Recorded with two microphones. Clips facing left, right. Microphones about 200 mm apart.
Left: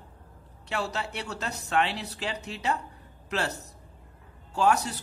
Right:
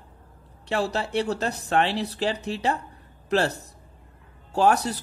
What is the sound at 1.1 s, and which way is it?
Speech, 30° right (ahead or behind).